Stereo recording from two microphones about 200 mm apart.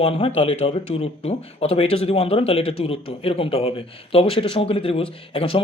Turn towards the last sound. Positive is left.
turn(degrees=25)  # may be behind; listen again after turning